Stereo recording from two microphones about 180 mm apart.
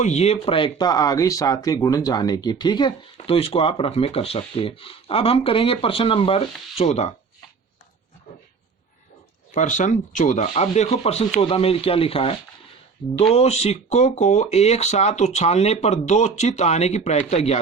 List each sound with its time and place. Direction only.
0.0 s speech: 40° left (ahead or behind)
9.6 s speech: 40° left (ahead or behind)